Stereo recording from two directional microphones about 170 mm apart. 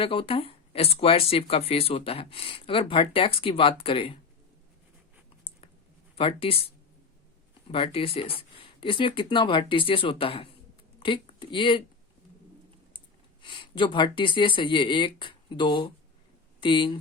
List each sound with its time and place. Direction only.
0.0 s speech: 30° left (ahead or behind)
6.1 s speech: 35° left (ahead or behind)
7.7 s speech: 35° left (ahead or behind)
13.4 s speech: 30° left (ahead or behind)